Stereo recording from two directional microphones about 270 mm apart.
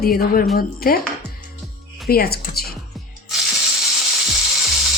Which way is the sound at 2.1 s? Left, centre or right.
Left.